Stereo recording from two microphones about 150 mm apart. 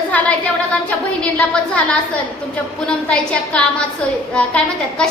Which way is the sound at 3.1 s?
5° left (ahead or behind).